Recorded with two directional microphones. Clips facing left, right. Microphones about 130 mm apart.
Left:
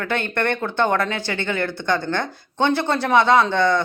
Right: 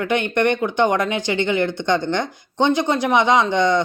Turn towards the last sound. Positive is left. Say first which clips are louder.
# even
turn(degrees=-20)  # may be behind; listen again after turning